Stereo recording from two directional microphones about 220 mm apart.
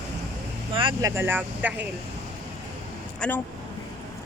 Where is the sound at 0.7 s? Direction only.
25° right (ahead or behind).